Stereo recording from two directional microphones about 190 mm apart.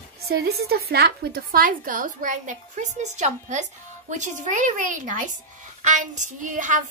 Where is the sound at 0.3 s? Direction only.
55° right (ahead or behind).